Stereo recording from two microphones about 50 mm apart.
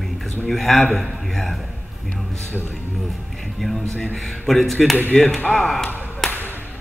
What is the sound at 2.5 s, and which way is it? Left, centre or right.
Speech, left.